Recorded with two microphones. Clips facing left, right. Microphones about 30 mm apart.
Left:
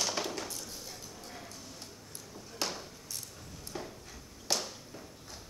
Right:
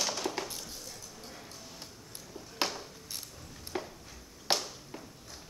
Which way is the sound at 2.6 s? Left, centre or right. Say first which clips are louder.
Right 3 dB; right.